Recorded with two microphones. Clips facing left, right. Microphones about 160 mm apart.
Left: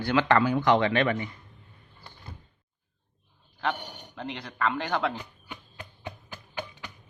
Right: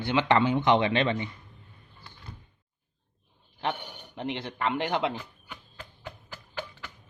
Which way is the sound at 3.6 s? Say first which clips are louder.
Left 1 dB; 20° right (ahead or behind).